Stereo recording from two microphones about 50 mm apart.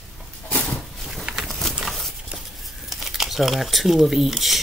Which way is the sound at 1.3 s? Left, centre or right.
Centre.